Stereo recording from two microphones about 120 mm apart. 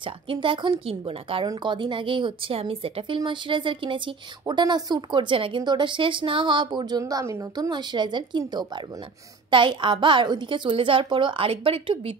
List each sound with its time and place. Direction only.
0.0 s a woman's voice: 45° right (ahead or behind)